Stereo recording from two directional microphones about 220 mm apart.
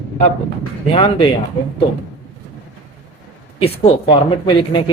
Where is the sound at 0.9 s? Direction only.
25° left (ahead or behind).